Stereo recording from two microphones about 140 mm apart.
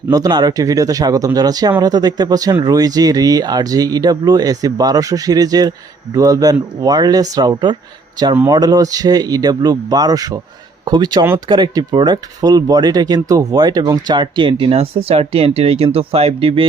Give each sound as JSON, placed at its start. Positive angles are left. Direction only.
{"t": 0.1, "sound": "speech", "side_deg": -30}